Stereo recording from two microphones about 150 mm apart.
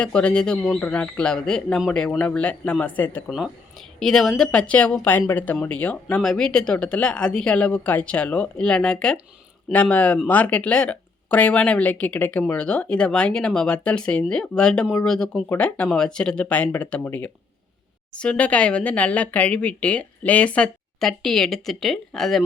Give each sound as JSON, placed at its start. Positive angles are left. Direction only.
{"t": 0.0, "sound": "speech", "side_deg": 5}
{"t": 3.2, "sound": "speech", "side_deg": 0}